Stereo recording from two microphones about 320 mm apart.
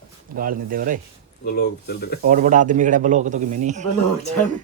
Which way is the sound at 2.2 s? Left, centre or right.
Right.